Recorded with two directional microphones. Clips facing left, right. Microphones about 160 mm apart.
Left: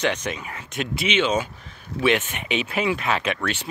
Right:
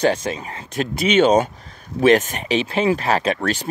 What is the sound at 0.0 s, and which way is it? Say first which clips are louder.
Speech: right 6 dB; 30° right (ahead or behind).